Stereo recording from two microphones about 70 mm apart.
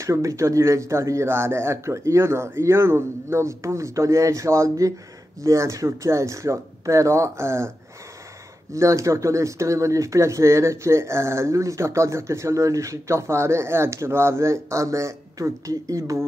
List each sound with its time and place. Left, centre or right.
0.0 s speech: right
8.7 s speech: right